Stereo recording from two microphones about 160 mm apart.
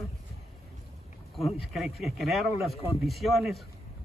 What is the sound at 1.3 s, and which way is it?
A man's voice, centre (ahead or behind).